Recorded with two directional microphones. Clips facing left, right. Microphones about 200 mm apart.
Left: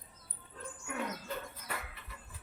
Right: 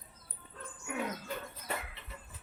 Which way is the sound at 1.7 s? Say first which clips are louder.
Right 4 dB; 25° right (ahead or behind).